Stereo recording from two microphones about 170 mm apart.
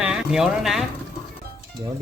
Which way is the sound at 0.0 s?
5° right (ahead or behind).